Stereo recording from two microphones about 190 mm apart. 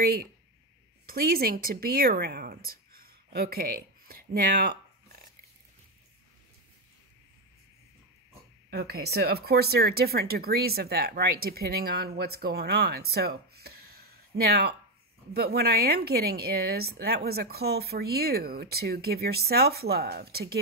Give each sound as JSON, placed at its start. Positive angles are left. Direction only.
{"t": 0.0, "sound": "speech", "side_deg": -55}
{"t": 8.6, "sound": "speech", "side_deg": -55}